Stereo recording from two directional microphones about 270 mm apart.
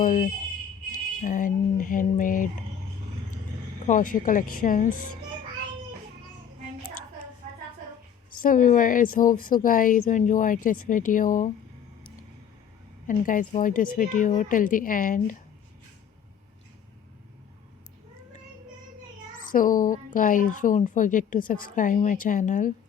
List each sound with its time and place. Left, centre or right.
0.0 s speech: left
3.9 s speech: left
8.3 s speech: left
13.1 s speech: left
19.5 s speech: left